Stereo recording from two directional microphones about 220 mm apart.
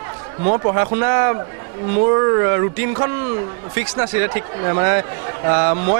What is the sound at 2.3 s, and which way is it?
Speech, 20° right (ahead or behind).